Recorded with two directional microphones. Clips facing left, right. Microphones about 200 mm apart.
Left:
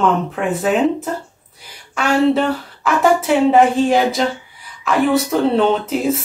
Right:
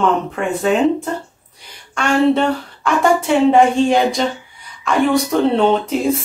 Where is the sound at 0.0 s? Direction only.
Centre (ahead or behind).